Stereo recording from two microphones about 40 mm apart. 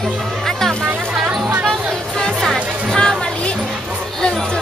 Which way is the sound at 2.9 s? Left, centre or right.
Centre.